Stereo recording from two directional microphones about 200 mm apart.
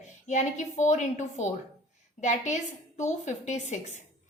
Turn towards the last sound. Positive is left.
turn(degrees=35)  # may be behind; listen again after turning